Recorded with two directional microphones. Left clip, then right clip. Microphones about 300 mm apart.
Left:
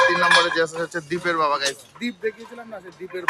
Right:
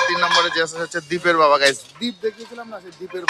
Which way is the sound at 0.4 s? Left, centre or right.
Centre.